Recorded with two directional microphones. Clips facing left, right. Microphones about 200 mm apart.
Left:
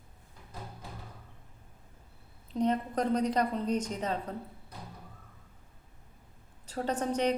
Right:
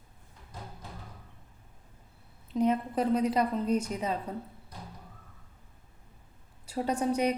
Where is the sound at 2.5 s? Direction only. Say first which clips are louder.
Right 2 dB; 5° right (ahead or behind).